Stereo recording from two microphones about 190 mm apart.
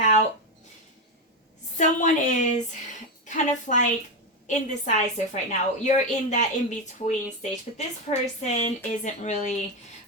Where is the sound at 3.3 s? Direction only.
40° left (ahead or behind).